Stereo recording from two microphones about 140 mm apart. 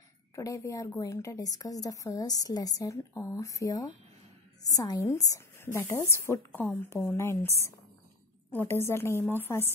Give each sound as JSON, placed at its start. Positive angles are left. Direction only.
{"t": 0.4, "sound": "a woman's voice", "side_deg": 20}